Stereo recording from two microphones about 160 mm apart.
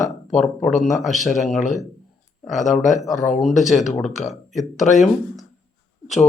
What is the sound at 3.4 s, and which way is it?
Speech, centre (ahead or behind).